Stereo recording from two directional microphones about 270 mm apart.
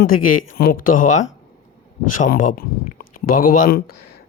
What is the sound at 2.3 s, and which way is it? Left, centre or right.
Speech, left.